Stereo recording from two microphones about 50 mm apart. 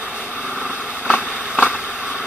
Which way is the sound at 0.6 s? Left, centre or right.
Left.